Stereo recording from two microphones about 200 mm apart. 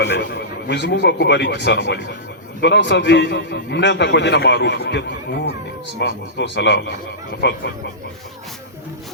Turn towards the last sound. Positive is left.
turn(degrees=60)  # may be behind; listen again after turning